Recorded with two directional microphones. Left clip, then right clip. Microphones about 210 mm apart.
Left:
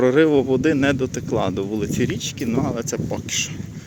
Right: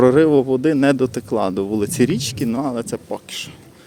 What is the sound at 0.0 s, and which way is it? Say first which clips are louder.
Speech: right 3 dB; 20° right (ahead or behind).